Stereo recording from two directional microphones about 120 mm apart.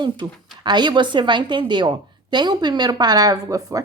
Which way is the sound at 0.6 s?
40° right (ahead or behind).